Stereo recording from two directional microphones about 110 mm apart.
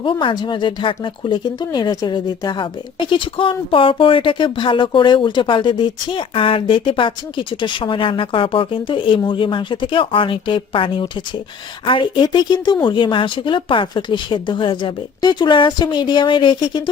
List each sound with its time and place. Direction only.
0.0 s speech: 50° left (ahead or behind)